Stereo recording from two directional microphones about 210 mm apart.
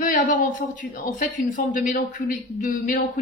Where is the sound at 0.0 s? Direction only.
35° left (ahead or behind).